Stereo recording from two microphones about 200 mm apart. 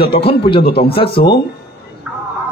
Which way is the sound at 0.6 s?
55° left (ahead or behind).